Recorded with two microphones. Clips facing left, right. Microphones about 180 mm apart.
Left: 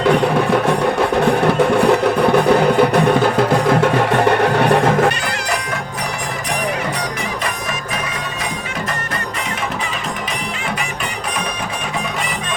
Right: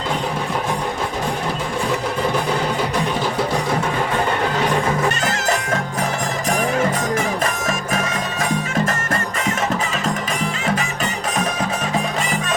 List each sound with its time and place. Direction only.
0.0 s music: 65° left (ahead or behind)